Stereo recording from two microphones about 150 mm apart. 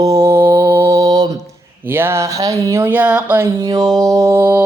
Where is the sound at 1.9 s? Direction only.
15° right (ahead or behind).